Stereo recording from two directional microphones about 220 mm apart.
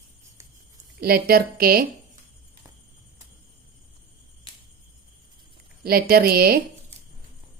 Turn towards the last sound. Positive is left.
turn(degrees=-45)  # may be behind; listen again after turning